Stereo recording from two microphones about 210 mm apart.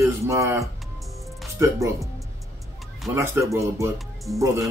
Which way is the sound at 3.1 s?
15° right (ahead or behind).